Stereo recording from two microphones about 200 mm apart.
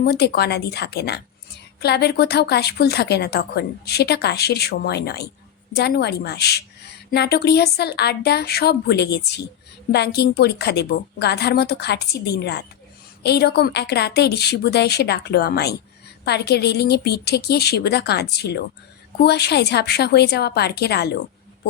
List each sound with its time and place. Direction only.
0.0 s a woman's voice: 55° left (ahead or behind)